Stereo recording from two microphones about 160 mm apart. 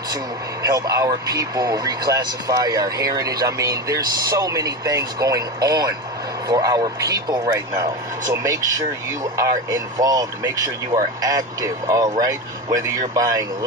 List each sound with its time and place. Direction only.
0.6 s speech: 20° right (ahead or behind)